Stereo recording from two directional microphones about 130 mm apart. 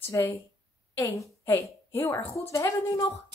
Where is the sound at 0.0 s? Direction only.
20° left (ahead or behind).